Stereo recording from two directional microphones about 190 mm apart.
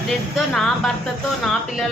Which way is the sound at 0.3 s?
5° left (ahead or behind).